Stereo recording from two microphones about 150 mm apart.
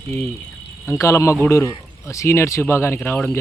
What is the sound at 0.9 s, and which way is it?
Speech, 20° left (ahead or behind).